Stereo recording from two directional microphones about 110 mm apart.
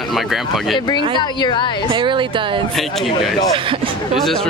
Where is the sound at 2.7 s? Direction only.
Centre (ahead or behind).